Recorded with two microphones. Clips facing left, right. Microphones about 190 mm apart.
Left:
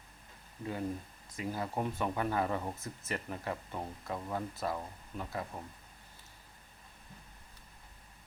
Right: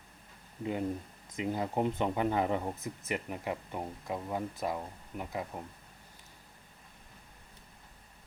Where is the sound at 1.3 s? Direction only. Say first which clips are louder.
Right 4 dB; 20° right (ahead or behind).